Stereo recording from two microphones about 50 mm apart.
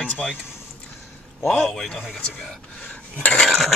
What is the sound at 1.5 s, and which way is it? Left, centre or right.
Speech, centre.